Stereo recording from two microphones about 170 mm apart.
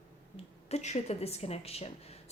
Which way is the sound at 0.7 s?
40° left (ahead or behind).